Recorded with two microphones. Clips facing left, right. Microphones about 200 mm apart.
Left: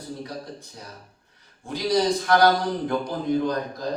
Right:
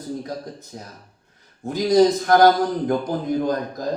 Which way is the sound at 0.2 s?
45° right (ahead or behind).